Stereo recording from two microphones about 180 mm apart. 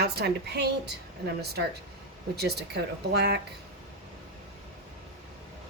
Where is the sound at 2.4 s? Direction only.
65° right (ahead or behind).